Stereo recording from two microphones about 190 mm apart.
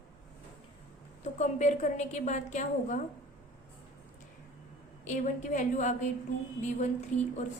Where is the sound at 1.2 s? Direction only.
40° left (ahead or behind).